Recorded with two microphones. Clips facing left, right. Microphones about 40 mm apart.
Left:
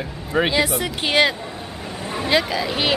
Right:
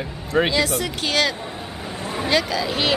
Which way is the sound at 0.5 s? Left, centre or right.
Centre.